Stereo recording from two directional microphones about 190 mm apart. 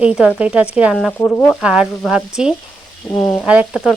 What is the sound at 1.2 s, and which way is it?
Frying, 10° left (ahead or behind).